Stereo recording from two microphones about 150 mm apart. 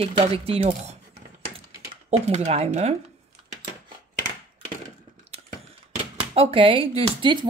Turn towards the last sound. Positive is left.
turn(degrees=-40)  # may be behind; listen again after turning